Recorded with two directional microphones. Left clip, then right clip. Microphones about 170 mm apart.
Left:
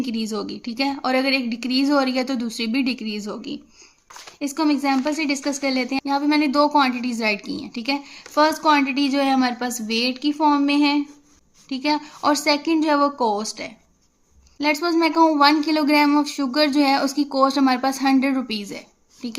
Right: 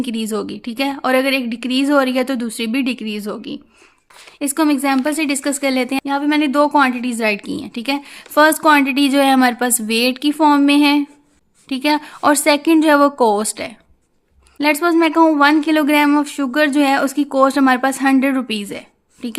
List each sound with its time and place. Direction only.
0.0 s speech: 35° right (ahead or behind)
4.4 s a woman's voice: 45° right (ahead or behind)
6.1 s a woman's voice: 30° right (ahead or behind); by 13.7 s 45° right (ahead or behind)
14.8 s speech: 30° right (ahead or behind)